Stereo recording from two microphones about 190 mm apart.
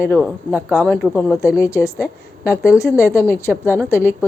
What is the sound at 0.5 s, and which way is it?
Speech, 5° right (ahead or behind).